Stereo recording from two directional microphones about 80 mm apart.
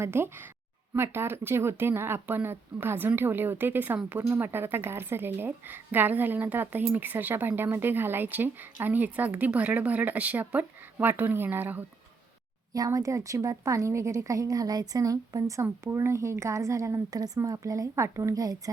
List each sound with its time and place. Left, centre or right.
0.0 s a woman's voice: right
12.7 s a woman's voice: right